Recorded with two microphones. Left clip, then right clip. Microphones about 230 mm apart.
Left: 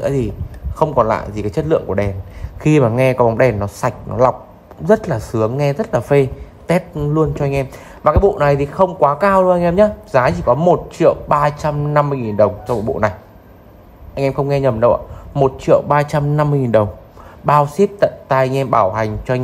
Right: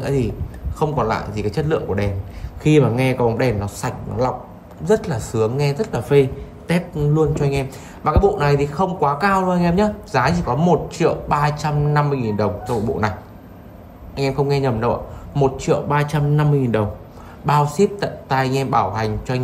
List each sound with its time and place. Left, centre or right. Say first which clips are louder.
0.0 s speech: left 3 dB; centre
14.1 s speech: left 3 dB; left
15.9 s a man's voice: left 5 dB; left
17.5 s speech: left 4 dB; left